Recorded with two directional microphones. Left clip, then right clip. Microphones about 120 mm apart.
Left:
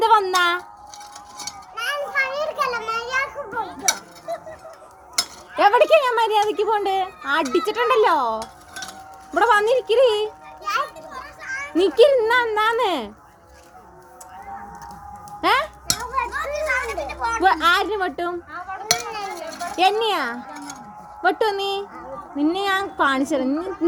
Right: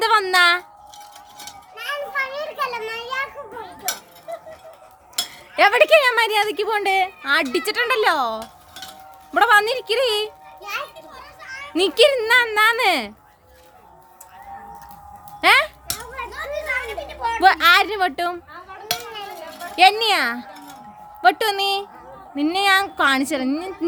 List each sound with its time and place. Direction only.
0.0 s a sound: 50° right (ahead or behind)
1.7 s children playing: 10° right (ahead or behind)
5.5 s a woman's voice: 55° right (ahead or behind)
7.5 s speech: 45° right (ahead or behind)
10.6 s children playing: 25° right (ahead or behind)
11.7 s a woman's voice: 60° right (ahead or behind)
15.4 s speech: 60° right (ahead or behind)
16.3 s children playing: 20° right (ahead or behind)
17.4 s a woman's voice: 55° right (ahead or behind)
18.9 s a sound: 10° left (ahead or behind)
19.7 s a woman's voice: 60° right (ahead or behind)